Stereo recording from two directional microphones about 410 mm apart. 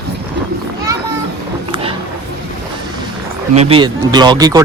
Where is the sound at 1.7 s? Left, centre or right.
Centre.